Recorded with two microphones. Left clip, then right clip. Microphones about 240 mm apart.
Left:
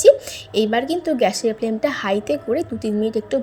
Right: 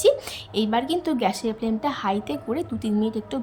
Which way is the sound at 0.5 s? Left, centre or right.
Centre.